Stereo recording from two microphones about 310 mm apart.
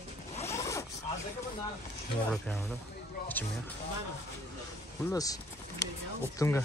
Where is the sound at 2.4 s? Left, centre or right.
Centre.